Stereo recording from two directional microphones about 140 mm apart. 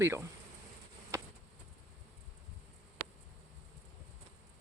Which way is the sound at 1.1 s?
20° right (ahead or behind).